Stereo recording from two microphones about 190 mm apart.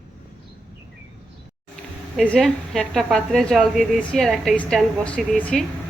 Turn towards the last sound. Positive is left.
turn(degrees=5)  # may be behind; listen again after turning